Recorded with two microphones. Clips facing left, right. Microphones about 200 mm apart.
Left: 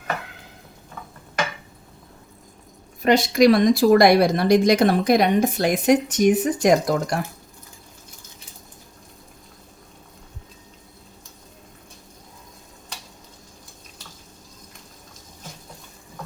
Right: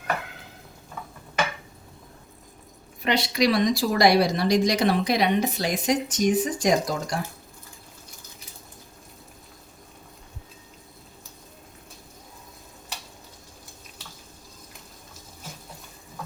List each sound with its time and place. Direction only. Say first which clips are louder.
3.0 s speech: left 7 dB; 45° left (ahead or behind)